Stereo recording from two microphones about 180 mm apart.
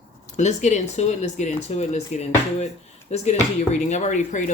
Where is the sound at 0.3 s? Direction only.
40° left (ahead or behind).